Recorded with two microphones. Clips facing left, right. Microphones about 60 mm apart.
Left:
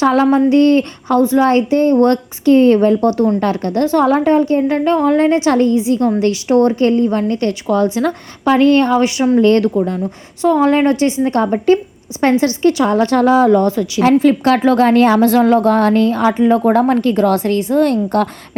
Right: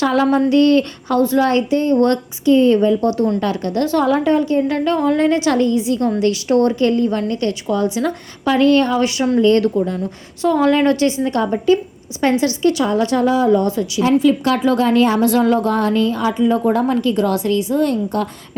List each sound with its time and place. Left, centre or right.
0.0 s a woman's voice: left
9.4 s a woman's voice: left
13.7 s a woman's voice: left
14.0 s a woman's voice: left